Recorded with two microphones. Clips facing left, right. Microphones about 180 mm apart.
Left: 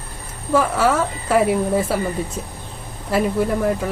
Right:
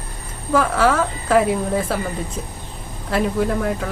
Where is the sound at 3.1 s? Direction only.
5° left (ahead or behind).